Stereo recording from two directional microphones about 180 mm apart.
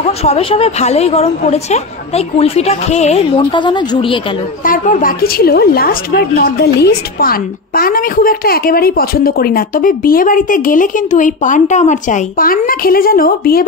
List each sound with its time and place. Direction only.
0.0 s a woman's voice: 35° left (ahead or behind)
4.6 s a woman's voice: 45° left (ahead or behind)